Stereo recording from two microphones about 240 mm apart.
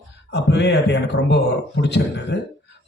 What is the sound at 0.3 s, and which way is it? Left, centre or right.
A man's voice, left.